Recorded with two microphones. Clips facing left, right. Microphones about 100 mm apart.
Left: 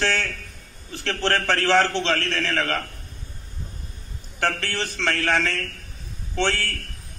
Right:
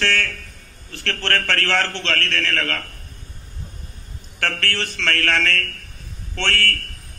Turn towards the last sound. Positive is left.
turn(degrees=15)  # may be behind; listen again after turning